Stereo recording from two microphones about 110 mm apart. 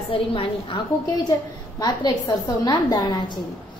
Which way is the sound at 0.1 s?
55° left (ahead or behind).